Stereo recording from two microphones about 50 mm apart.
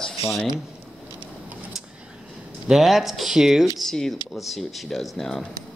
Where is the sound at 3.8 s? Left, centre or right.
Centre.